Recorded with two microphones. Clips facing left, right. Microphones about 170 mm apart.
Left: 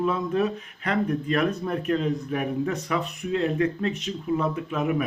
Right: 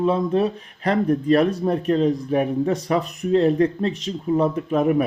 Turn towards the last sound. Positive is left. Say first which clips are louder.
# right 7 dB
turn(degrees=-40)  # may be behind; listen again after turning